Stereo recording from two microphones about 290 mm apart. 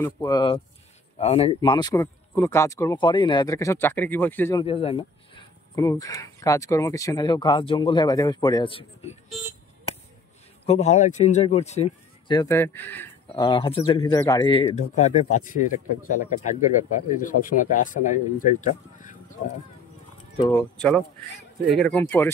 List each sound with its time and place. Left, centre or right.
0.0 s speech: centre
4.6 s speech: centre
9.9 s a sound: left
10.6 s speech: left
20.3 s speech: centre